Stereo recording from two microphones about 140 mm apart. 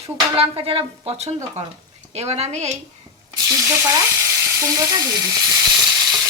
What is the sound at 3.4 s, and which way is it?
Frying, 20° right (ahead or behind).